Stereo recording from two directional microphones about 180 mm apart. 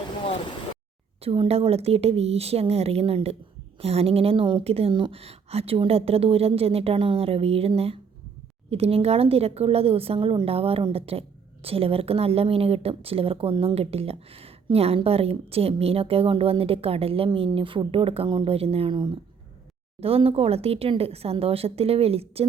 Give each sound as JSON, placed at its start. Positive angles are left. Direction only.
{"t": 1.2, "sound": "a woman's voice", "side_deg": -30}
{"t": 20.0, "sound": "a woman's voice", "side_deg": -30}